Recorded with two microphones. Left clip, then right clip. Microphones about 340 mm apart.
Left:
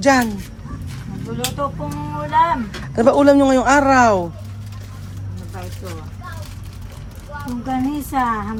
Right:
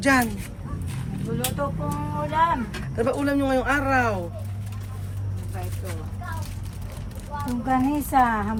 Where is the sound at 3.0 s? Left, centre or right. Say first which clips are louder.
Left 12 dB; centre.